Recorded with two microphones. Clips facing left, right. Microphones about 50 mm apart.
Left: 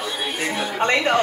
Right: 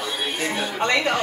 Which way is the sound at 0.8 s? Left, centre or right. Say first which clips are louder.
Left 2 dB; left.